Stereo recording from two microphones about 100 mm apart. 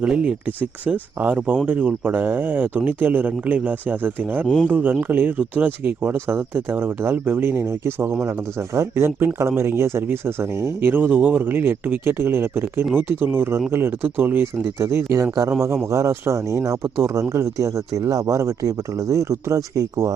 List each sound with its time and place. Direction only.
0.0 s speech: 10° right (ahead or behind); by 20.1 s 35° right (ahead or behind)